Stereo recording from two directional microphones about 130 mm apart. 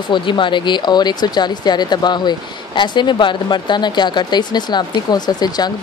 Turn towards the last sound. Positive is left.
turn(degrees=30)  # may be behind; listen again after turning